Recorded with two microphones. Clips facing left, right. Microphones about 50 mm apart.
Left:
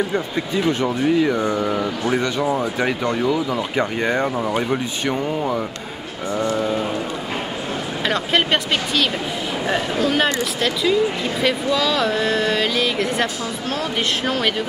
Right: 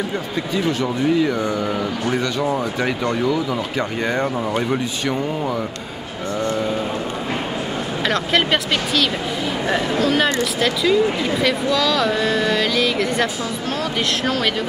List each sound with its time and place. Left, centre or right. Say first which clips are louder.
0.8 s speech: even; centre
4.4 s speech: even; centre
8.1 s speech: even; centre